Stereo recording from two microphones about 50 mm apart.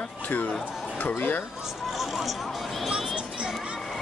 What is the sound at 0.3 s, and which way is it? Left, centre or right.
Speech, left.